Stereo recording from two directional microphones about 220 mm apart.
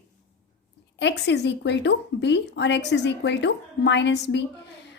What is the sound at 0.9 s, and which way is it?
A woman's voice, 50° left (ahead or behind).